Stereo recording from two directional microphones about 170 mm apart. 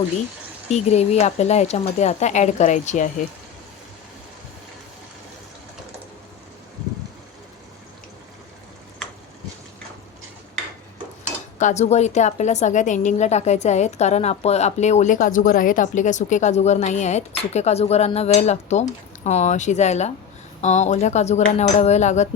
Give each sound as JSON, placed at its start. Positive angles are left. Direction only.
{"t": 0.7, "sound": "a woman's voice", "side_deg": 40}
{"t": 11.6, "sound": "a woman's voice", "side_deg": 40}